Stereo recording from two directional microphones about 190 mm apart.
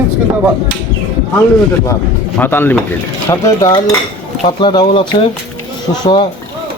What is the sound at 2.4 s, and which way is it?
Speech, 10° left (ahead or behind).